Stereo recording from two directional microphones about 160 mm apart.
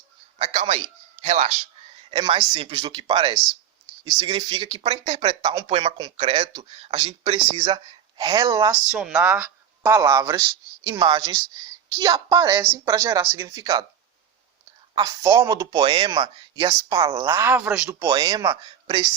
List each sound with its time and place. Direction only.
0.3 s a man's voice: 45° right (ahead or behind)
2.0 s speech: 35° right (ahead or behind)
6.1 s speech: 40° right (ahead or behind)
6.4 s speech: 30° right (ahead or behind)
7.5 s speech: 25° right (ahead or behind)
8.9 s speech: 5° right (ahead or behind); by 13.8 s 25° right (ahead or behind)
14.9 s speech: 20° right (ahead or behind)
17.2 s speech: 15° right (ahead or behind)
18.0 s speech: 25° right (ahead or behind)